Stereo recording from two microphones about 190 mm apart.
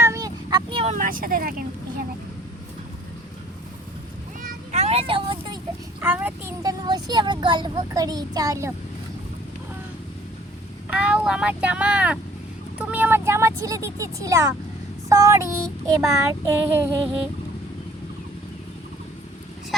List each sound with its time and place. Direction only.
0.0 s vehicle: 15° right (ahead or behind)
0.9 s speech: 45° right (ahead or behind)
4.4 s a sound: 35° right (ahead or behind)
6.0 s speech: 10° right (ahead or behind)
6.6 s a child's voice: 20° right (ahead or behind)
10.8 s speech: 5° right (ahead or behind)